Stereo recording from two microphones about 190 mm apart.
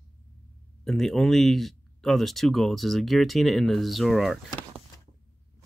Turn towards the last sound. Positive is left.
turn(degrees=0)  # may be behind; listen again after turning